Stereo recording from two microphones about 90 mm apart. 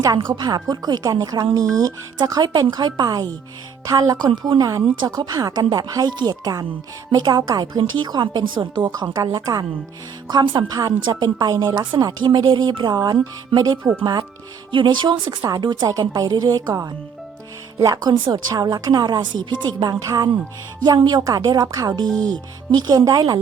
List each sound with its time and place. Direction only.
0.0 s a woman's voice: 50° right (ahead or behind)
10.4 s speech: 70° right (ahead or behind)
10.7 s a woman's voice: 45° right (ahead or behind)
11.0 s a woman's voice: 55° right (ahead or behind)
15.4 s a woman's voice: 50° right (ahead or behind)
15.9 s a woman's voice: 45° right (ahead or behind)